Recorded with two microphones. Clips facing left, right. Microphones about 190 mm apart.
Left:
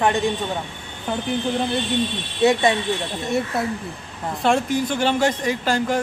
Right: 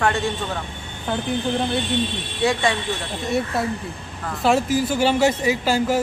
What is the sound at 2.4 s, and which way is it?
Speech, 20° left (ahead or behind).